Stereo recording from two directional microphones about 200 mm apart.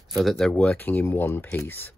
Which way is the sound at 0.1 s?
Centre (ahead or behind).